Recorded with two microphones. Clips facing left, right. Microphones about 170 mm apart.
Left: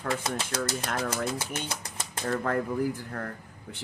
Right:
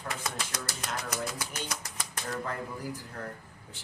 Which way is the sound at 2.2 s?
55° left (ahead or behind).